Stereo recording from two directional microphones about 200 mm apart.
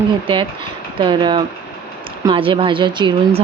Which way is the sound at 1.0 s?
25° right (ahead or behind).